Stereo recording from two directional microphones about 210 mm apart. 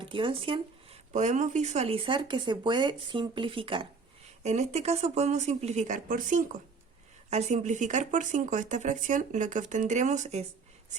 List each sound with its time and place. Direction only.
0.0 s speech: 25° right (ahead or behind)
1.1 s speech: 35° right (ahead or behind)